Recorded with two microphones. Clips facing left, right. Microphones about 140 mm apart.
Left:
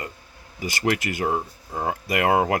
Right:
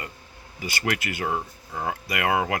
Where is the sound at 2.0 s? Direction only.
40° left (ahead or behind).